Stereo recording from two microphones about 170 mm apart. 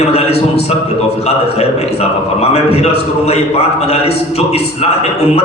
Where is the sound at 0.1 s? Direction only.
35° left (ahead or behind).